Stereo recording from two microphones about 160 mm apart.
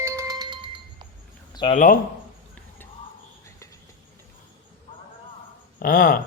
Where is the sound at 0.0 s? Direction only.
20° right (ahead or behind).